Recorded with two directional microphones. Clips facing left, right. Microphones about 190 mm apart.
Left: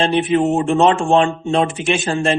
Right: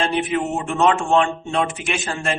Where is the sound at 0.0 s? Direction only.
30° left (ahead or behind).